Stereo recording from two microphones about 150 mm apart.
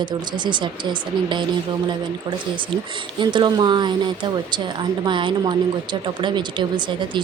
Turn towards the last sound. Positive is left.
turn(degrees=-30)  # may be behind; listen again after turning